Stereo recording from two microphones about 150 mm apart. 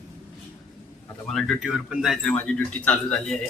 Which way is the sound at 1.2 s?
5° left (ahead or behind).